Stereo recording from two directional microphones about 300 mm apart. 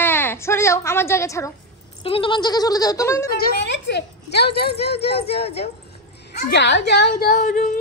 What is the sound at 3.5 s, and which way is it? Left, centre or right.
Speech, left.